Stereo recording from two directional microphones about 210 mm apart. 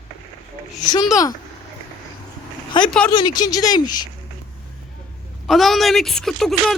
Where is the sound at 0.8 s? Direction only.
20° left (ahead or behind).